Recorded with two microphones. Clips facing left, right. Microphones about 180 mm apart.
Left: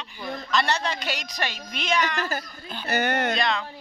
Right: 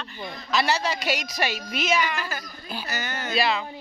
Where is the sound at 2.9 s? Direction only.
60° left (ahead or behind).